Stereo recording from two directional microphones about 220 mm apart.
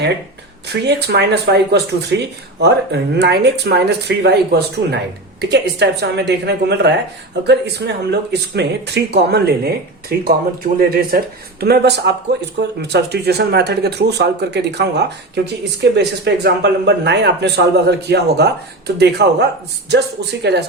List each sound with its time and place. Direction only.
0.7 s speech: 50° right (ahead or behind)